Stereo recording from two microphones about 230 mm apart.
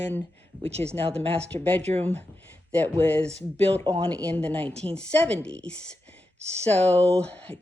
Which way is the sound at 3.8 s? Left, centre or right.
Right.